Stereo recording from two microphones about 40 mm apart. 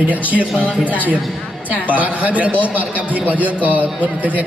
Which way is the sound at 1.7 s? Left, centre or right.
Right.